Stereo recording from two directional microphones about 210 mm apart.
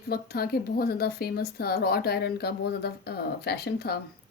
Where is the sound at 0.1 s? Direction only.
45° left (ahead or behind).